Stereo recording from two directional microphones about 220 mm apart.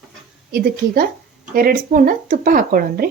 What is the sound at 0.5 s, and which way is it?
Speech, 40° right (ahead or behind).